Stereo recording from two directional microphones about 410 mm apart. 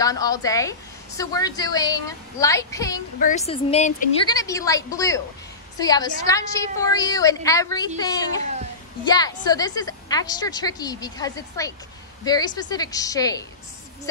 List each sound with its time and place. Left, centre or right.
0.0 s a woman's voice: centre
9.0 s a woman's voice: centre